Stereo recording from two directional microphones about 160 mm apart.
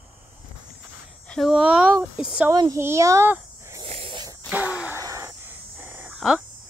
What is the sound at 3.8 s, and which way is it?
Wheeze, 35° right (ahead or behind).